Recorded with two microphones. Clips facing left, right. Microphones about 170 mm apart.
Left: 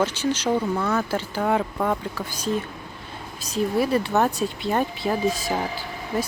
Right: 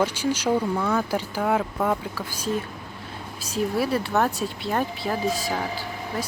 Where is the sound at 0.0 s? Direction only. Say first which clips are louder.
Even; 10° right (ahead or behind).